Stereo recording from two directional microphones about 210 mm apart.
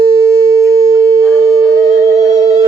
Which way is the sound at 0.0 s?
15° right (ahead or behind).